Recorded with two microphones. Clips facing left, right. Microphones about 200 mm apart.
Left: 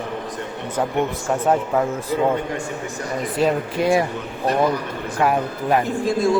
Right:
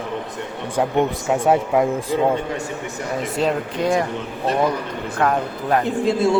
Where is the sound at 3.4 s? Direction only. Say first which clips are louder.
Left 2 dB; 5° left (ahead or behind).